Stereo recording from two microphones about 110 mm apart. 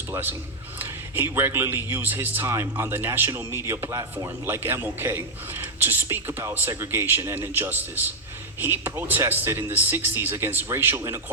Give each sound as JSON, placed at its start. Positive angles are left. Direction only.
{"t": 0.1, "sound": "a man's voice", "side_deg": -20}